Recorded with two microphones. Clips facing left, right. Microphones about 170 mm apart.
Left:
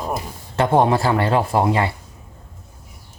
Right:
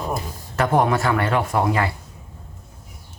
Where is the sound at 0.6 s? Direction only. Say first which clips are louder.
Left 3 dB; 30° left (ahead or behind).